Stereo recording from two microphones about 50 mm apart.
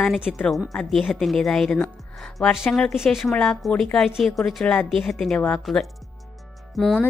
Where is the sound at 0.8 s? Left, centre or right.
Centre.